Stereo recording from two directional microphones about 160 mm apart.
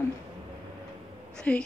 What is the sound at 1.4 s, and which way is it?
Speech, 5° left (ahead or behind).